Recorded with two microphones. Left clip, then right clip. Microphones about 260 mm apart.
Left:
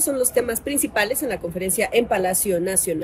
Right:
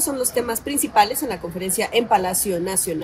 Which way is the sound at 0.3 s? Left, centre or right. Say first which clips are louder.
Left 1 dB; centre.